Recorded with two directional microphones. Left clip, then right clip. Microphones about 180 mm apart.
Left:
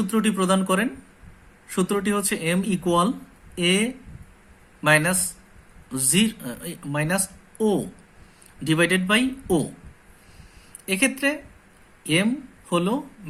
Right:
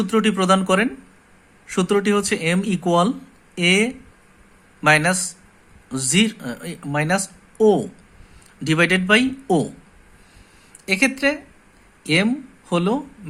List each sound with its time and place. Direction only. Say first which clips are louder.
0.0 s speech: right 4 dB; 40° right (ahead or behind)
10.8 s speech: right 4 dB; 35° right (ahead or behind)